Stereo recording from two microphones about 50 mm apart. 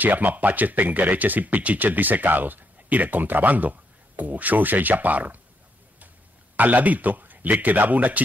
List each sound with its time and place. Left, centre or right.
0.0 s speech: right
6.5 s speech: right